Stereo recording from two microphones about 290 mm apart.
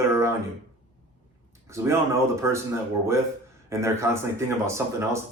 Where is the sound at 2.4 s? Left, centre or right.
Centre.